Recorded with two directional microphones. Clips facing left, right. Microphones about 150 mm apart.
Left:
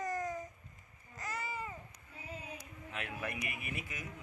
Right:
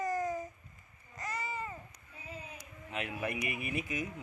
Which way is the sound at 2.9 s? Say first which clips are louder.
Right 5 dB; 20° right (ahead or behind).